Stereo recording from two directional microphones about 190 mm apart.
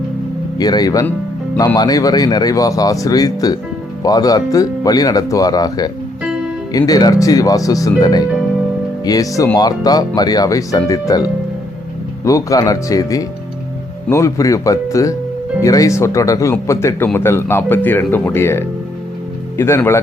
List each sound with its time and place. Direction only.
0.6 s speech: 20° left (ahead or behind)